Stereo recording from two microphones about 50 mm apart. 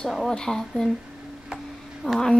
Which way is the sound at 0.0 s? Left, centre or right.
Centre.